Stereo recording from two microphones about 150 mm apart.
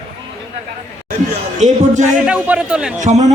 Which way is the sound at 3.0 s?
50° right (ahead or behind).